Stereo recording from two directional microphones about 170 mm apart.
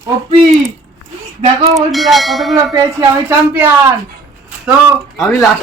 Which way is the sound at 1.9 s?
Centre (ahead or behind).